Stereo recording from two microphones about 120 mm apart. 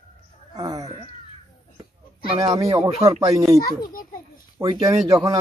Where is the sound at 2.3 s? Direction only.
35° right (ahead or behind).